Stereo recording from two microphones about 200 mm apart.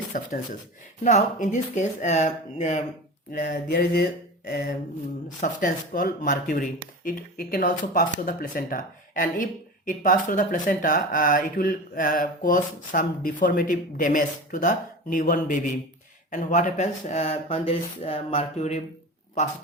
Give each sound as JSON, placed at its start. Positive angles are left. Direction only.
{"t": 0.1, "sound": "speech", "side_deg": 40}
{"t": 3.3, "sound": "speech", "side_deg": 50}